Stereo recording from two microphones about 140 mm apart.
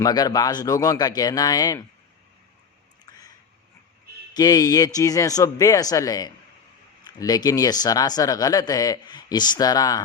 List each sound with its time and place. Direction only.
0.0 s speech: 30° left (ahead or behind)
4.4 s speech: 25° left (ahead or behind)